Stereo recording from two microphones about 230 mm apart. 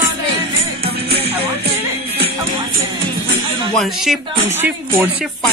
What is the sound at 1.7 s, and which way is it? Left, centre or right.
Music, right.